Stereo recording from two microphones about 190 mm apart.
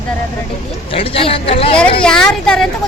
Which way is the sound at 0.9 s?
30° left (ahead or behind).